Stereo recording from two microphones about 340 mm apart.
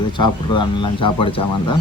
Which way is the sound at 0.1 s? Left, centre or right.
Centre.